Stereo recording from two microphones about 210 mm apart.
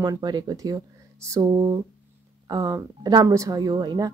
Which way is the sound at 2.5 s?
15° right (ahead or behind).